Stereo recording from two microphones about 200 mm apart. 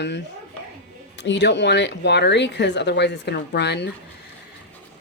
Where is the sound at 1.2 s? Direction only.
60° left (ahead or behind).